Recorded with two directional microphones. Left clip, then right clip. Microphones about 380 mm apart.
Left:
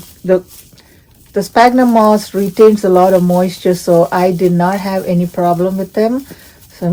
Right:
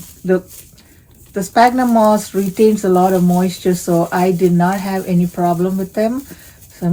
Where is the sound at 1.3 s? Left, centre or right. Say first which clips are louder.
Left 3 dB; left.